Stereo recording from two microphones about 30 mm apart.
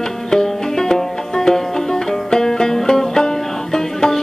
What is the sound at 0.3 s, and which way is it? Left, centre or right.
Music, left.